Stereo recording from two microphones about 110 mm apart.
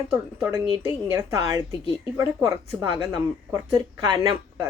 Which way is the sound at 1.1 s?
30° right (ahead or behind).